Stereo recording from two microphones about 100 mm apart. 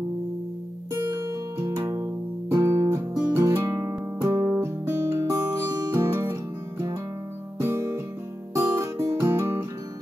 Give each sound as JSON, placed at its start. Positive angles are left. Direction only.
{"t": 0.9, "sound": "music", "side_deg": -35}
{"t": 7.6, "sound": "music", "side_deg": -25}